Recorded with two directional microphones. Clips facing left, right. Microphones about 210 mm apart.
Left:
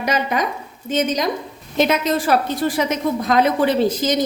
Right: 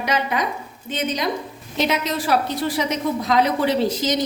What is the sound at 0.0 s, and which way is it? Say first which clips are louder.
A woman's voice: left 2 dB; 45° left (ahead or behind).